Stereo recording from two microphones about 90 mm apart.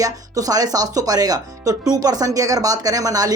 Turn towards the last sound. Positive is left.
turn(degrees=-40)  # may be behind; listen again after turning